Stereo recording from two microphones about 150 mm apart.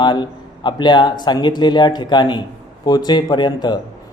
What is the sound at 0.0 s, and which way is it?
Speech, 30° left (ahead or behind).